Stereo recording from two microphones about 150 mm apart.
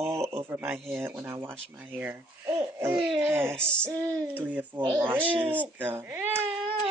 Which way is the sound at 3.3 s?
15° right (ahead or behind).